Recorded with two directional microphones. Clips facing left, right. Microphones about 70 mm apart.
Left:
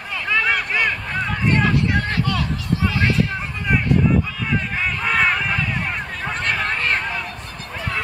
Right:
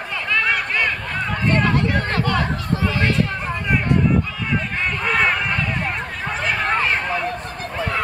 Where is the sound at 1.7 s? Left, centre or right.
Right.